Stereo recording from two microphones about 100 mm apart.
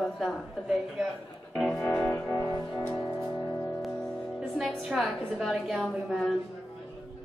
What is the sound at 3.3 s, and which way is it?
Music, 30° left (ahead or behind).